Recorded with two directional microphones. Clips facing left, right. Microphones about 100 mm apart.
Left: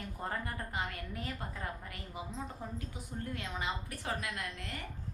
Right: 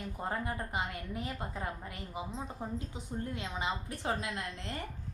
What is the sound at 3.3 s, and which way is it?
A woman's voice, 20° right (ahead or behind).